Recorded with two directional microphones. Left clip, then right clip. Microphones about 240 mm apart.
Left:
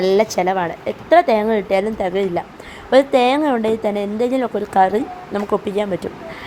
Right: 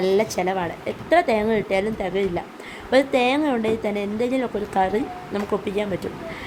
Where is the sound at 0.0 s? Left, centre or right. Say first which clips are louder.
Left 5 dB; centre.